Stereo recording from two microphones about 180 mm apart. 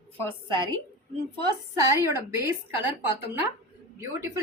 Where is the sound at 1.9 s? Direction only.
15° right (ahead or behind).